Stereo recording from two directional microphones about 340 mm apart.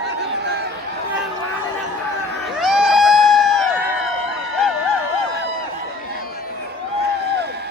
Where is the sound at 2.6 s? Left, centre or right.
Centre.